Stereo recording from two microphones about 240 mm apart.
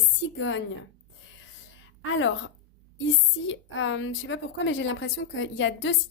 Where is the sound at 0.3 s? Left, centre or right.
Left.